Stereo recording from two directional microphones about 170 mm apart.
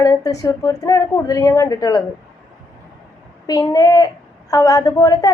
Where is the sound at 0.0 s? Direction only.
20° left (ahead or behind).